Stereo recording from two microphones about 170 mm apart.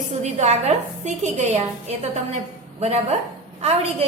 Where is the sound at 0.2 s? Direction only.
40° right (ahead or behind).